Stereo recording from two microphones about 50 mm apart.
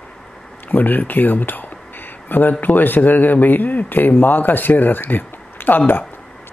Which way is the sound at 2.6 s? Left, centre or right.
Left.